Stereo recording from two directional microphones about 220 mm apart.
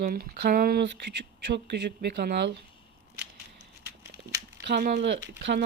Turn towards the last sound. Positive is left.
turn(degrees=-50)  # may be behind; listen again after turning